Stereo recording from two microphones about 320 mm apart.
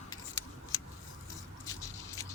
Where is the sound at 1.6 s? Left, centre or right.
Centre.